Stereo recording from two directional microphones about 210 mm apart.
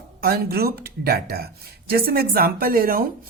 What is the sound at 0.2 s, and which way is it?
A woman's voice, 45° right (ahead or behind).